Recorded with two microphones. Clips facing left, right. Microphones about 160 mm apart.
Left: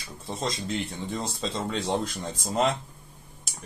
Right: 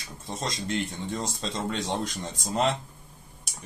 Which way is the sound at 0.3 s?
Centre (ahead or behind).